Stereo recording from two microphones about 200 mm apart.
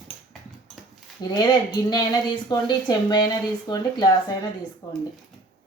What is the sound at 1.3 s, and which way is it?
Speech, 20° left (ahead or behind).